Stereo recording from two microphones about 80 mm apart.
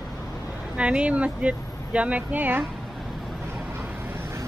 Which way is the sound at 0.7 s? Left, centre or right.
Centre.